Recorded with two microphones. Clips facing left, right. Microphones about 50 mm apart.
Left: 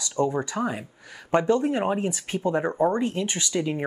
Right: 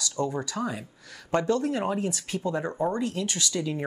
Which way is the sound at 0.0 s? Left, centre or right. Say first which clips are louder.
Left 4 dB; left.